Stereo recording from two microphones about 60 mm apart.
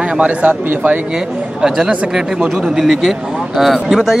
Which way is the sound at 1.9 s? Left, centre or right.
Centre.